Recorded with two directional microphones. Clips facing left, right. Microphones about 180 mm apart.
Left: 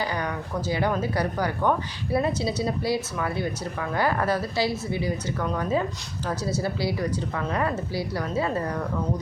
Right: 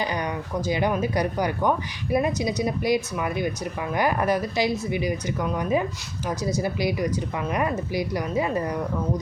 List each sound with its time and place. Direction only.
0.0 s speech: 20° right (ahead or behind)